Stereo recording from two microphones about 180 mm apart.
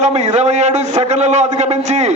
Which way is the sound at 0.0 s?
40° right (ahead or behind).